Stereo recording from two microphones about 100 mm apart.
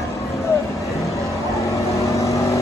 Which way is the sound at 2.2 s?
30° left (ahead or behind).